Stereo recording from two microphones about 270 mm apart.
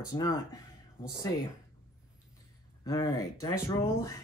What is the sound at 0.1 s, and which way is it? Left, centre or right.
Speech, centre.